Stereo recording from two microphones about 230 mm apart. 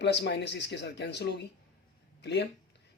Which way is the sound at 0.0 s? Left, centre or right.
Left.